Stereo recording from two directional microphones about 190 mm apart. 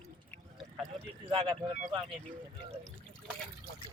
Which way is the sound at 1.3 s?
25° right (ahead or behind).